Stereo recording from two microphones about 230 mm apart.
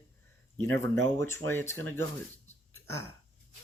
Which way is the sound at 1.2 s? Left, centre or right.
Centre.